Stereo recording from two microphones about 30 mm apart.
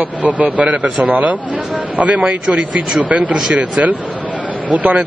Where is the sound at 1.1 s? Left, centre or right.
Right.